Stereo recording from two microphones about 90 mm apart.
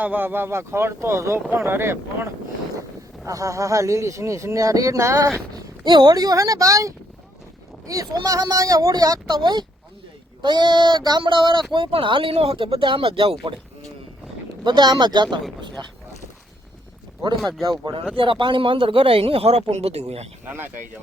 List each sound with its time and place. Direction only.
0.0 s speech: 20° right (ahead or behind)
3.2 s speech: 40° right (ahead or behind)
5.8 s speech: 55° right (ahead or behind); by 6.9 s 35° right (ahead or behind)
8.1 s speech: 40° right (ahead or behind)
9.4 s speech: 55° right (ahead or behind)
11.2 s speech: 65° right (ahead or behind)
11.7 s speech: 80° right
14.6 s speech: 55° right (ahead or behind)
17.7 s speech: 55° right (ahead or behind)
18.2 s speech: 70° right (ahead or behind); by 19.7 s 90° right